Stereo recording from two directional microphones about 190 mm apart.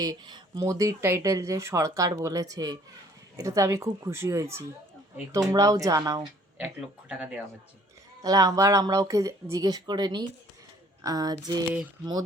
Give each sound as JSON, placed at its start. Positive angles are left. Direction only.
{"t": 0.0, "sound": "speech", "side_deg": -20}
{"t": 6.6, "sound": "speech", "side_deg": -5}
{"t": 8.2, "sound": "speech", "side_deg": -20}